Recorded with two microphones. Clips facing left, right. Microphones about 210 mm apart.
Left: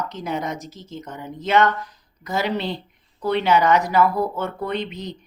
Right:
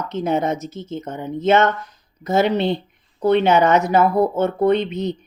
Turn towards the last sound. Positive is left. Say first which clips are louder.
# right 9 dB
turn(degrees=-25)  # may be behind; listen again after turning